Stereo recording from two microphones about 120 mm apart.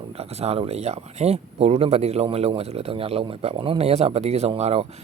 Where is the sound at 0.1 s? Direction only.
60° right (ahead or behind).